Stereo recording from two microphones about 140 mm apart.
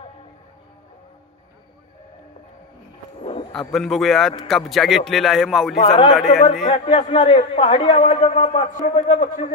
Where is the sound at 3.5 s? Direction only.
5° left (ahead or behind).